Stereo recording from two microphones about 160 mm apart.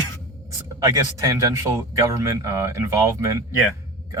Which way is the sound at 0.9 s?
20° right (ahead or behind).